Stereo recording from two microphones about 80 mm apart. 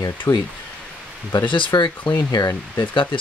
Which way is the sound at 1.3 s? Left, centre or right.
Left.